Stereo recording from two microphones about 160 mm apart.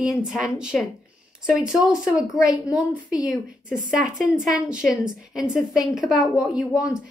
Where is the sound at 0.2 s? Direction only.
5° right (ahead or behind).